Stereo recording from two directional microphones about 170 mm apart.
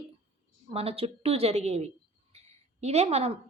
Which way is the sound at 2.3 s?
40° right (ahead or behind).